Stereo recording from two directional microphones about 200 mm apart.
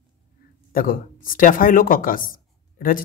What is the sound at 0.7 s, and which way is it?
Speech, 45° left (ahead or behind).